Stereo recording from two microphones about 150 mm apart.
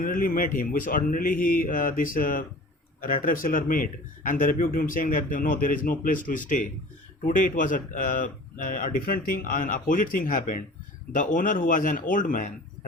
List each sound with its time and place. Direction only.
0.0 s speech: 65° left (ahead or behind)